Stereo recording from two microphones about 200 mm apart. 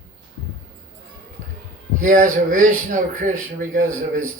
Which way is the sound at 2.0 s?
40° right (ahead or behind).